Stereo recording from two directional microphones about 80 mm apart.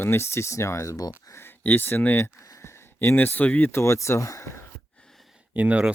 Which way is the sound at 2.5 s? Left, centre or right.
Left.